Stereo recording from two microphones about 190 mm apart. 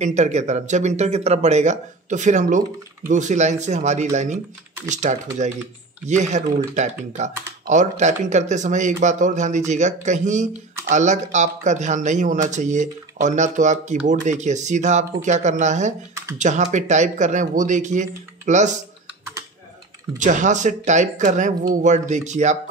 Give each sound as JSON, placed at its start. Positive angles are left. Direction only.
{"t": 0.0, "sound": "speech", "side_deg": -35}
{"t": 20.2, "sound": "speech", "side_deg": -40}